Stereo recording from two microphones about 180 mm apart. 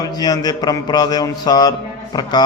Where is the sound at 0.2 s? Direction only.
20° left (ahead or behind).